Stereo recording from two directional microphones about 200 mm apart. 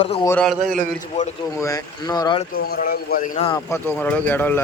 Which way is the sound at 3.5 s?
10° left (ahead or behind).